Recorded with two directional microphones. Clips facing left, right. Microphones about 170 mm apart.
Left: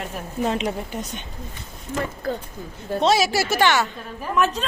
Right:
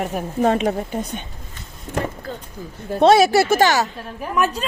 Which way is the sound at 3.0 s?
55° right (ahead or behind).